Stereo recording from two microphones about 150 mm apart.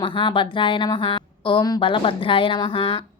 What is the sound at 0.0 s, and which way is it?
A woman's voice, 35° left (ahead or behind).